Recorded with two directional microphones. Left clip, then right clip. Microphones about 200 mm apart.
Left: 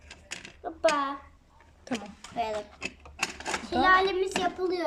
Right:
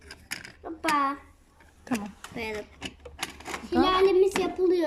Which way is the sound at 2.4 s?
20° left (ahead or behind).